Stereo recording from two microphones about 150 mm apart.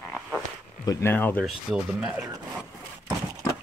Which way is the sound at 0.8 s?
20° left (ahead or behind).